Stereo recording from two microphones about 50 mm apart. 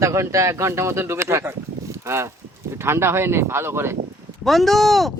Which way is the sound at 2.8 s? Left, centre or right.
Right.